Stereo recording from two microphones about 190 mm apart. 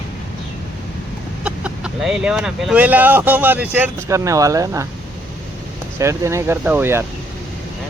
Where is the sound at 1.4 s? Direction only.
5° right (ahead or behind).